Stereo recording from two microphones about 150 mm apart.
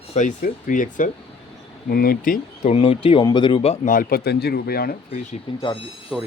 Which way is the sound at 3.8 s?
65° left (ahead or behind).